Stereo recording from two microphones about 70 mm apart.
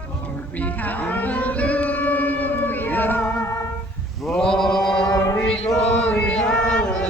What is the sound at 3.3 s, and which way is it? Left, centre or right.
Music, left.